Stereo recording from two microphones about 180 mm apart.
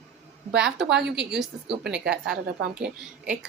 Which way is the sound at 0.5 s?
5° right (ahead or behind).